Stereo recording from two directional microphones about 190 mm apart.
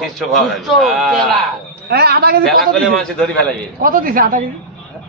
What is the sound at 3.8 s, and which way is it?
Speech, 50° right (ahead or behind).